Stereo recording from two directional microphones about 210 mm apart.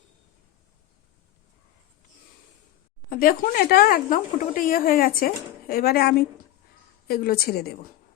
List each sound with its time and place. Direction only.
3.1 s speech: 40° left (ahead or behind)